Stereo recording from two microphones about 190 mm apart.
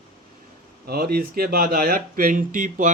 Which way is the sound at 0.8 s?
55° right (ahead or behind).